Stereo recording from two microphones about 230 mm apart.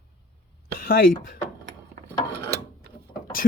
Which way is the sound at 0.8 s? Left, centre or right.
Left.